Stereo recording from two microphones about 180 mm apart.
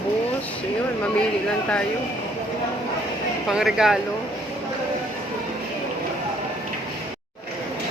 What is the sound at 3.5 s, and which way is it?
Speech, 5° right (ahead or behind).